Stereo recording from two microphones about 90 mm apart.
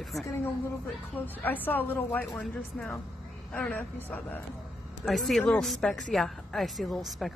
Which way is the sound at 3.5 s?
15° left (ahead or behind).